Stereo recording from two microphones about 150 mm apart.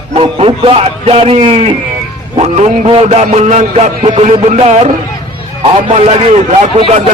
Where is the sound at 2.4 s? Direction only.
45° right (ahead or behind).